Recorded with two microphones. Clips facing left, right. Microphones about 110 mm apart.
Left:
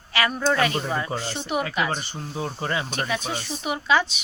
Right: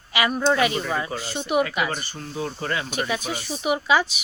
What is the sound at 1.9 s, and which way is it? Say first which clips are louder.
Speech: left 1 dB; 20° left (ahead or behind).